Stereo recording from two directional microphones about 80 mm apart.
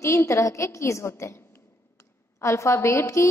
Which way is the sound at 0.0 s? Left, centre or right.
Left.